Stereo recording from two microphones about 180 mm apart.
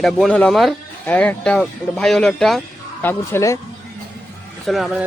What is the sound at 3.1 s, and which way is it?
Speech, 15° left (ahead or behind).